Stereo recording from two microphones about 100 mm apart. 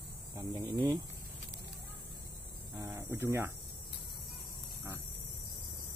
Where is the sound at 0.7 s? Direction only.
40° right (ahead or behind).